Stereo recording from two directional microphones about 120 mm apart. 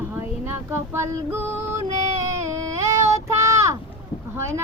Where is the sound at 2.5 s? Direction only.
25° right (ahead or behind).